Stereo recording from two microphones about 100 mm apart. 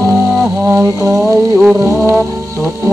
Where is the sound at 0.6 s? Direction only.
30° right (ahead or behind).